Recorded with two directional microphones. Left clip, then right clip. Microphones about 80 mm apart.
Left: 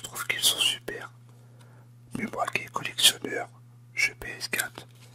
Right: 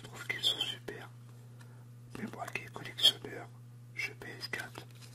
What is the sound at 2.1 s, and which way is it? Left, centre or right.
Whispering, left.